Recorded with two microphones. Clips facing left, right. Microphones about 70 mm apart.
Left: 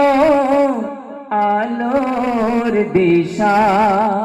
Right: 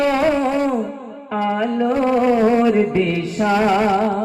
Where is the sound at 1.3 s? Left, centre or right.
Left.